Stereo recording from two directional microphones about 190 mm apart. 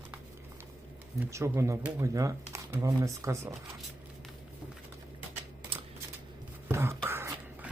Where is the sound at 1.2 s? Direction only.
15° right (ahead or behind).